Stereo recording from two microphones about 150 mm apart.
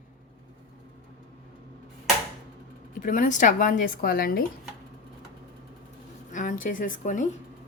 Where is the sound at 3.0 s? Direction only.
60° left (ahead or behind); by 4.4 s 80° left.